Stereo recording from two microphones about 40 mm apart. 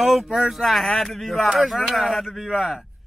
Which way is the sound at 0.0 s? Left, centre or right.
Centre.